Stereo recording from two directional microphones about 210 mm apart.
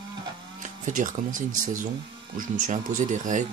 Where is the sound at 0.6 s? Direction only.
35° right (ahead or behind).